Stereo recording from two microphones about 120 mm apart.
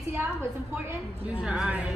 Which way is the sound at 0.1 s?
20° right (ahead or behind).